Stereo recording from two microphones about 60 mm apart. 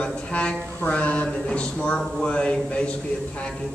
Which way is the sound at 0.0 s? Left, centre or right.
Centre.